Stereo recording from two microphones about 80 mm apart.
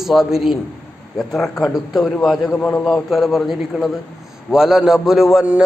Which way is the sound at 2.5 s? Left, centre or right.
Centre.